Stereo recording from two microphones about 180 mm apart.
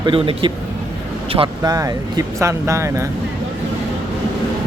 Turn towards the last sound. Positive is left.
turn(degrees=-15)  # may be behind; listen again after turning